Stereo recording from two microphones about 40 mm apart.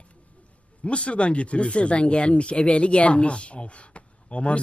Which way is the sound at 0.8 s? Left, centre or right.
Left.